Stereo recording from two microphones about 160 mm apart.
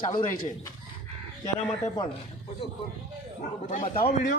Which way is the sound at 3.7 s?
60° left (ahead or behind).